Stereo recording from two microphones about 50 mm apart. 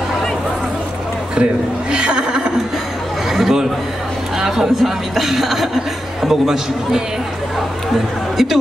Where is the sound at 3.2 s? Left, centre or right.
Centre.